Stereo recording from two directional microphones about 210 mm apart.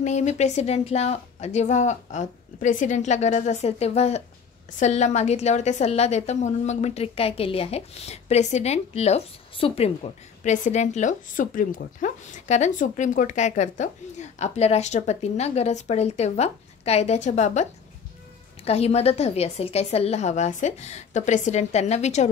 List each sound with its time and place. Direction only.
0.0 s a woman's voice: 35° left (ahead or behind)